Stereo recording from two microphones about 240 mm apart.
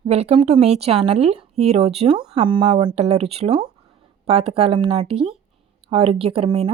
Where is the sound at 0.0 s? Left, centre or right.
Right.